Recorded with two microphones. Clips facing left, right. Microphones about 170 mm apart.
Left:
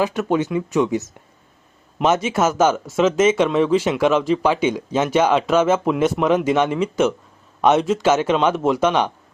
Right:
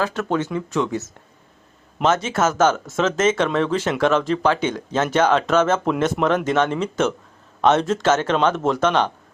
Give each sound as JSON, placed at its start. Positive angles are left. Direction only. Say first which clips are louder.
{"t": 0.0, "sound": "speech", "louder": "left 3 dB", "side_deg": 15}